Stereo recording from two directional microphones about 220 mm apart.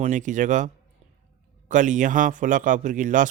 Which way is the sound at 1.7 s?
35° right (ahead or behind).